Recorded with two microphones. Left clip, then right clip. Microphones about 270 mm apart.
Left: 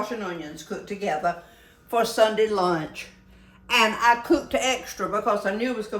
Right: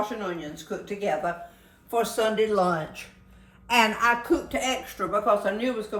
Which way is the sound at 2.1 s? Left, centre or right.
Left.